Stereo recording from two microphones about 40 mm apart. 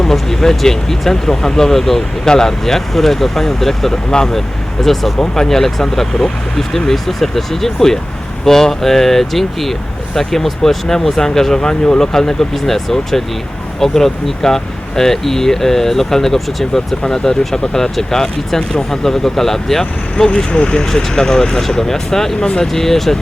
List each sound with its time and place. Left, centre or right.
0.0 s speech: centre
20.1 s speech: centre
20.8 s speech: centre
22.4 s speech: centre
22.6 s speech: centre